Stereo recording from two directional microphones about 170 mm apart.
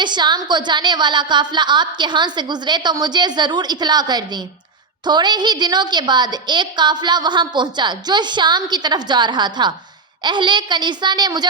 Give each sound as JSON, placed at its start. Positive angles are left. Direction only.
{"t": 0.0, "sound": "a woman's voice", "side_deg": -25}